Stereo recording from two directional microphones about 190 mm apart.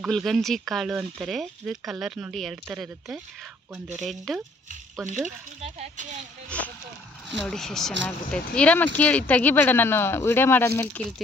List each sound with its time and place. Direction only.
0.0 s speech: centre (ahead or behind)
5.6 s speech: 40° right (ahead or behind)
6.5 s speech: 5° left (ahead or behind)